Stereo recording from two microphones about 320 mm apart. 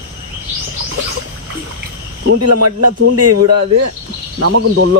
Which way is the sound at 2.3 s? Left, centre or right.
Right.